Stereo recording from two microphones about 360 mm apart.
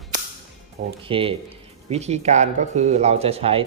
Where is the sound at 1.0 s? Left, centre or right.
Centre.